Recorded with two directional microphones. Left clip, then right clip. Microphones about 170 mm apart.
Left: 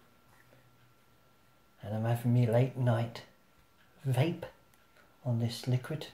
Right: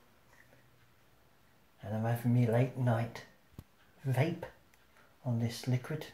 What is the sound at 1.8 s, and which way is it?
Speech, 5° left (ahead or behind).